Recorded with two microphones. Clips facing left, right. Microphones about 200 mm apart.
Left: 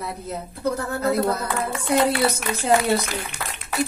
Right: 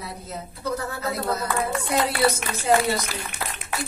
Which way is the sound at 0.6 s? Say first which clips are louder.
Left 5 dB; 55° left (ahead or behind).